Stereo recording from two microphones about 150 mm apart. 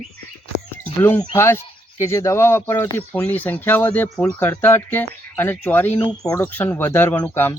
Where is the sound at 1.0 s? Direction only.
15° left (ahead or behind).